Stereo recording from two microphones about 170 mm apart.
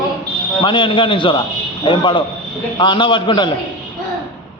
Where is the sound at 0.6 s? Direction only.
30° left (ahead or behind).